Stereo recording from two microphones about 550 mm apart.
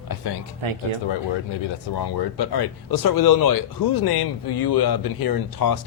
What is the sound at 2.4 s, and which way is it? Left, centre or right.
Speech, left.